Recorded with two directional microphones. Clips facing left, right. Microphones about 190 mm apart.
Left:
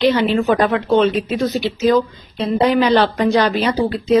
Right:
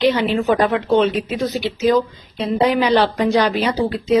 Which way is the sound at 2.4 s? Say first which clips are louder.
Left 2 dB; 10° right (ahead or behind).